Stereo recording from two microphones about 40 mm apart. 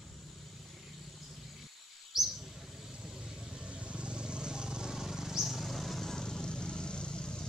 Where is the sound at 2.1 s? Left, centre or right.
Centre.